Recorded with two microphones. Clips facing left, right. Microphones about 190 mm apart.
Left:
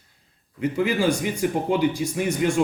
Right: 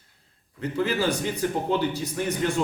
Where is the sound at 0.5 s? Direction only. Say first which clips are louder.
Left 3 dB; 15° left (ahead or behind).